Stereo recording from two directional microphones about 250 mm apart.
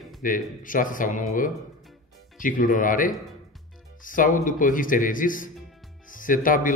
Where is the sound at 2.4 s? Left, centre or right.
Left.